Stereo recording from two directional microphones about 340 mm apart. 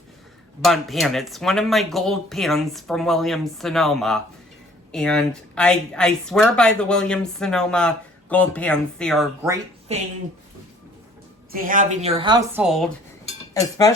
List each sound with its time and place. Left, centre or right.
0.6 s speech: centre
9.9 s speech: centre
11.5 s a woman's voice: right; by 12.9 s centre
13.5 s speech: centre